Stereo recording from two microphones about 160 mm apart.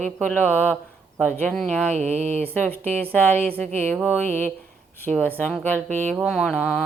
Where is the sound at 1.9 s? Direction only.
45° right (ahead or behind).